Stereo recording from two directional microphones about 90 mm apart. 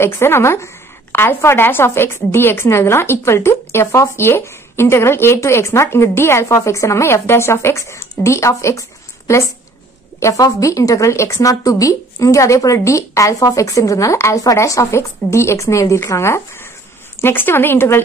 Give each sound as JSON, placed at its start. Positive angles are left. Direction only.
{"t": 0.0, "sound": "a woman's voice", "side_deg": 30}